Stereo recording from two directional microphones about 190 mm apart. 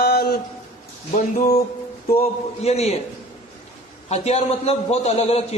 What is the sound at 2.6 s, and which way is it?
Speech, 35° left (ahead or behind).